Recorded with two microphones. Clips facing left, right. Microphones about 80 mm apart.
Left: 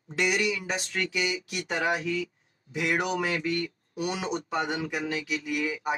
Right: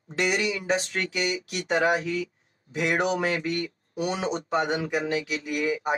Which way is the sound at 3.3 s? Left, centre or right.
Centre.